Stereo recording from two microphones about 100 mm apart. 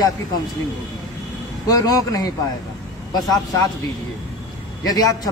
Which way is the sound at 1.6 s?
40° left (ahead or behind).